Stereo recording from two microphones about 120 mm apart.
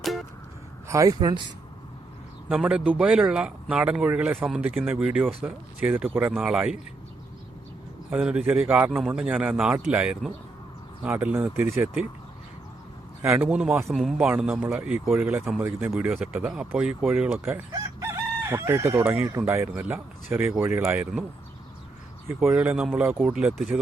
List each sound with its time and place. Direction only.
0.0 s a sound: centre (ahead or behind)
0.9 s speech: 25° right (ahead or behind)
2.5 s speech: 5° right (ahead or behind)
8.1 s speech: 10° right (ahead or behind)
9.0 s speech: 10° right (ahead or behind)
13.2 s speech: 15° right (ahead or behind)
16.3 s chicken: 10° right (ahead or behind)
19.2 s speech: 20° right (ahead or behind)
22.4 s speech: 5° right (ahead or behind)